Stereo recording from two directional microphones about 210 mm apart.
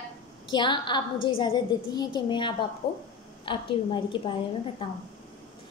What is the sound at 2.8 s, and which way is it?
Speech, 50° left (ahead or behind).